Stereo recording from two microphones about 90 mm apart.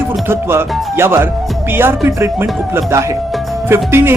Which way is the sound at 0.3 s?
25° right (ahead or behind).